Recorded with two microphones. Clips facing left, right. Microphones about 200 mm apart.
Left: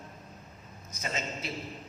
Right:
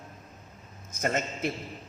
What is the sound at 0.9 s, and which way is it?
Speech, 50° right (ahead or behind).